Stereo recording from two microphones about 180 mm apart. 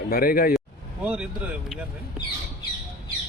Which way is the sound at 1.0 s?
5° right (ahead or behind).